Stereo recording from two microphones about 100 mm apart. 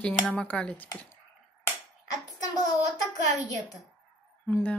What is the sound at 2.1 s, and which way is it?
Child singing, 40° left (ahead or behind).